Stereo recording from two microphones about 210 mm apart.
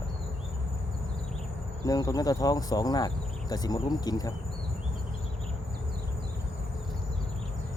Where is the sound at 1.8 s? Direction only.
15° left (ahead or behind).